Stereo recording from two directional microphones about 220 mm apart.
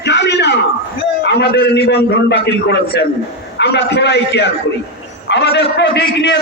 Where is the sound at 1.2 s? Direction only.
50° left (ahead or behind).